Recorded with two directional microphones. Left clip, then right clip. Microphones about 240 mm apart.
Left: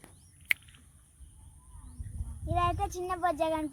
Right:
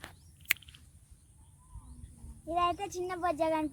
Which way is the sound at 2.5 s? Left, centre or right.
Centre.